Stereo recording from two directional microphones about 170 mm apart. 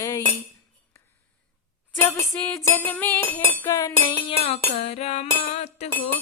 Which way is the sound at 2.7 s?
10° left (ahead or behind).